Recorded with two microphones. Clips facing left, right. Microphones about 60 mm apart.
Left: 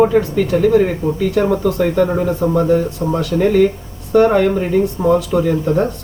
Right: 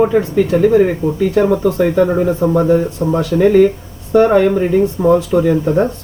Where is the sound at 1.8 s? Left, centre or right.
Centre.